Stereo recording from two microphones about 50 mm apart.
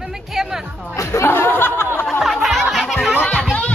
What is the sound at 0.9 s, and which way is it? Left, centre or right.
Chatter, left.